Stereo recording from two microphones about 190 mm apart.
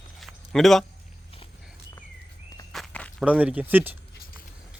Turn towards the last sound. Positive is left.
turn(degrees=-10)  # may be behind; listen again after turning